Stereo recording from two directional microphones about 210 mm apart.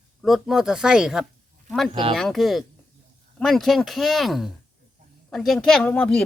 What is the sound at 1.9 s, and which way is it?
Mantra, 25° right (ahead or behind).